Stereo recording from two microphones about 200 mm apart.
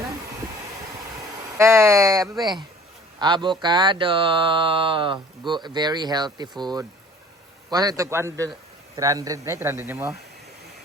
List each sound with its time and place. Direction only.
1.5 s a man's voice: 15° right (ahead or behind)